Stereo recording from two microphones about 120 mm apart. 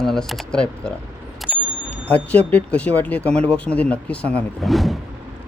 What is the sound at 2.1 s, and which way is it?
Speech, 15° left (ahead or behind).